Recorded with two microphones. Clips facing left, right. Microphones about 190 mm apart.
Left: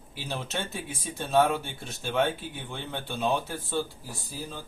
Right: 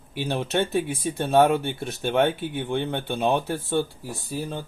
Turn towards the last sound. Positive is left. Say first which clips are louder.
# right 8 dB
turn(degrees=-60)  # may be behind; listen again after turning